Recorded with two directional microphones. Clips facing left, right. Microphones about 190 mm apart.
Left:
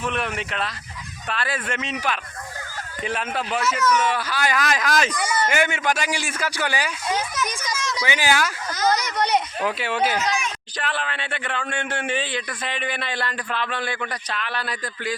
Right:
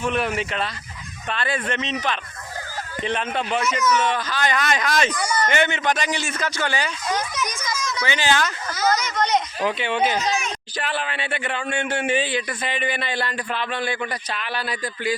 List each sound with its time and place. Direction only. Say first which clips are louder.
0.0 s speech: right 3 dB; centre (ahead or behind)